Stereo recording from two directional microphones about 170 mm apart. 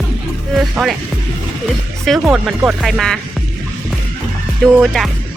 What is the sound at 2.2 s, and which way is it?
Speech, 10° right (ahead or behind).